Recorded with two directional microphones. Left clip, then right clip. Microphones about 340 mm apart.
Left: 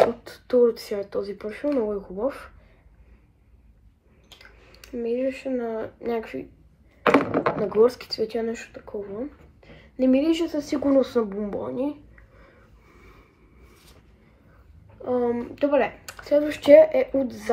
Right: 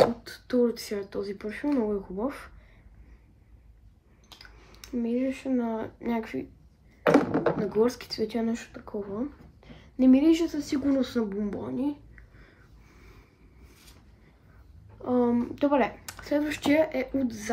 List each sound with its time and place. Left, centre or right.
0.3 s speech: centre
4.7 s speech: centre
7.4 s a sound: centre
7.8 s speech: centre
15.0 s speech: centre